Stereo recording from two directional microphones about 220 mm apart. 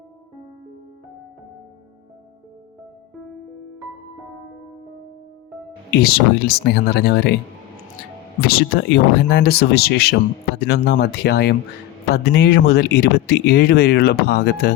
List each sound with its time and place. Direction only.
6.0 s speech: 45° left (ahead or behind)
8.4 s speech: 45° left (ahead or behind)